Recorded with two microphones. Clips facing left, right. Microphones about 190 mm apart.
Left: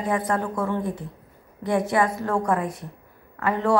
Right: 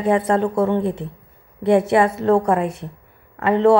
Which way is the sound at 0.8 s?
70° right (ahead or behind).